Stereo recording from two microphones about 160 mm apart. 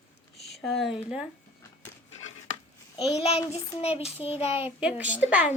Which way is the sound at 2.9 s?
40° left (ahead or behind).